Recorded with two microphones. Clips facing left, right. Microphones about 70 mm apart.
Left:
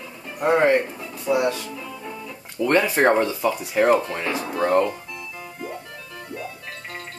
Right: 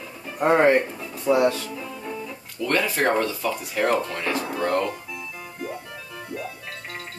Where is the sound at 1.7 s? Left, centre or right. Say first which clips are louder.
Right 1 dB; centre.